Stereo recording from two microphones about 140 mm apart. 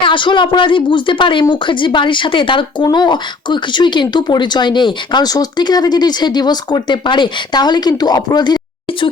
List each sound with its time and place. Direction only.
0.0 s speech: 35° left (ahead or behind)